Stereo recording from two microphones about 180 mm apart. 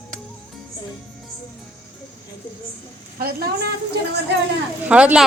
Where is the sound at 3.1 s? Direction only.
60° right (ahead or behind).